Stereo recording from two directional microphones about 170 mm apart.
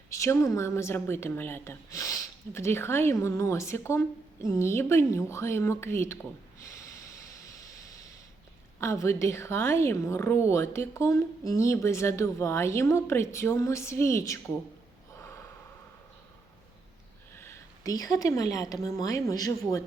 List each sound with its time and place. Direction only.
0.1 s a woman's voice: 15° left (ahead or behind)
6.7 s snort: 20° left (ahead or behind)
8.8 s a woman's voice: 15° left (ahead or behind)
17.3 s a woman's voice: 15° left (ahead or behind)